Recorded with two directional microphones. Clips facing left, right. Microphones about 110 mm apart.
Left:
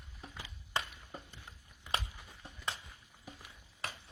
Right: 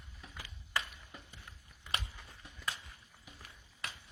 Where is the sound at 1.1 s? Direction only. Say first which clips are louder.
Left 4 dB; 40° left (ahead or behind).